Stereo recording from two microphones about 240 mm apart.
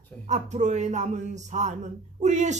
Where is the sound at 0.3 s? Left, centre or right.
Right.